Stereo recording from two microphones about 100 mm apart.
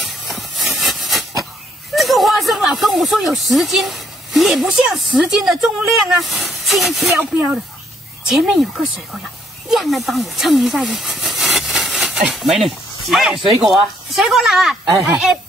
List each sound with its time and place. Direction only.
0.0 s a sound: centre (ahead or behind)
2.0 s speech: centre (ahead or behind)
7.2 s speech: 20° right (ahead or behind)
8.4 s speech: 5° right (ahead or behind)